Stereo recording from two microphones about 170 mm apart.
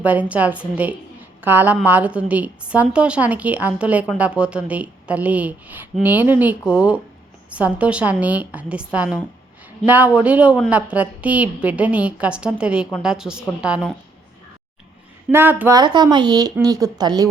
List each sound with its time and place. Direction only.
0.0 s a woman's voice: 10° right (ahead or behind)
15.3 s a woman's voice: 10° right (ahead or behind)
15.8 s a woman's voice: 25° right (ahead or behind)